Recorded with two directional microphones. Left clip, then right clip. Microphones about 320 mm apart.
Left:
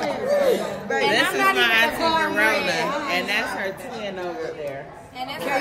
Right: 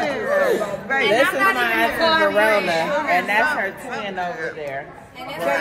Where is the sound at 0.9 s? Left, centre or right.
Centre.